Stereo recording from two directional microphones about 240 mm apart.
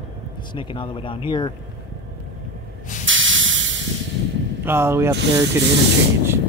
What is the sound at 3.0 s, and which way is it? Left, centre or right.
Hiss, right.